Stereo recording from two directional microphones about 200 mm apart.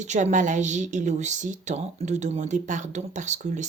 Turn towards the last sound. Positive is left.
turn(degrees=-35)  # may be behind; listen again after turning